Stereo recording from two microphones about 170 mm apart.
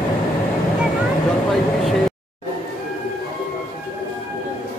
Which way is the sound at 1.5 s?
Centre (ahead or behind).